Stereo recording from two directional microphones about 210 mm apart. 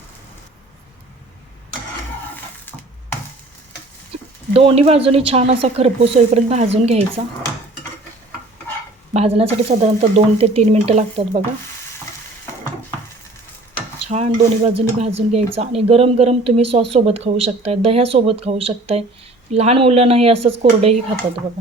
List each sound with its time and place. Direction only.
4.5 s speech: 30° right (ahead or behind)
9.1 s speech: 25° right (ahead or behind)
14.0 s speech: 30° right (ahead or behind)